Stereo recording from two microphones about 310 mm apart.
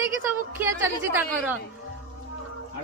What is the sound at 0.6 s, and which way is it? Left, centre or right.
Speech, centre.